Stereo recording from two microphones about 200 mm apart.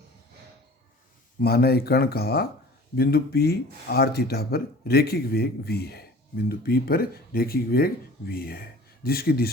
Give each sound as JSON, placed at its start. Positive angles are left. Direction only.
{"t": 1.4, "sound": "speech", "side_deg": 50}